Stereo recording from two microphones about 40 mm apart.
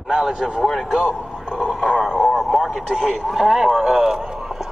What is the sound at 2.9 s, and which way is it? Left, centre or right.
A man's voice, centre.